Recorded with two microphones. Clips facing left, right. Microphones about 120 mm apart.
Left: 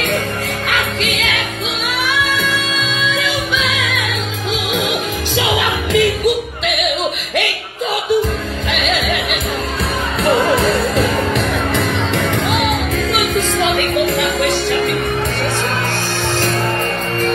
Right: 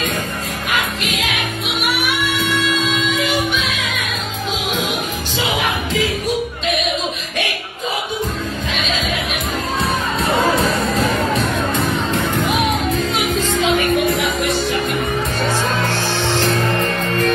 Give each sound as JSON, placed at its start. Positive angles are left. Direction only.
{"t": 0.7, "sound": "music", "side_deg": 90}
{"t": 5.4, "sound": "music", "side_deg": 90}
{"t": 11.3, "sound": "music", "side_deg": 65}
{"t": 12.3, "sound": "music", "side_deg": 90}